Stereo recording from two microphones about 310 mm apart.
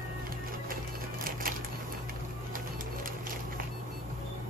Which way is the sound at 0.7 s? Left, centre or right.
Right.